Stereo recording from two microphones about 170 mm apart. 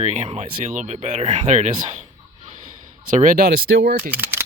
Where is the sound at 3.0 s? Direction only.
50° right (ahead or behind); by 4.1 s 75° right (ahead or behind).